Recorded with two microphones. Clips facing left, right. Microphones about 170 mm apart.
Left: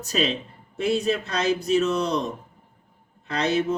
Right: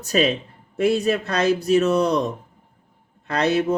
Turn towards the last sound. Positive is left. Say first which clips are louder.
# right 3 dB
turn(degrees=-60)  # may be behind; listen again after turning